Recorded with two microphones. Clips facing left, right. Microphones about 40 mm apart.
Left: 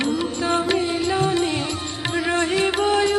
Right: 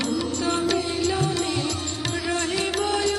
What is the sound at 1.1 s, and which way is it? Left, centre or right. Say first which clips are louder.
Music: left 4 dB; left.